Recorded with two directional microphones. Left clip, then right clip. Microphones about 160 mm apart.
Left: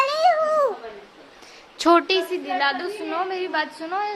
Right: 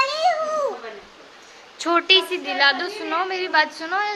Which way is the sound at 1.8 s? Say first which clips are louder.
Left 4 dB; 40° left (ahead or behind).